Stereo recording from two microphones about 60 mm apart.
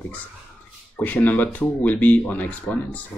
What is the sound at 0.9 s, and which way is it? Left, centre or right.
Speech, left.